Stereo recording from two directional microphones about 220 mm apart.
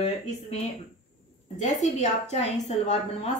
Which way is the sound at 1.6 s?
30° left (ahead or behind).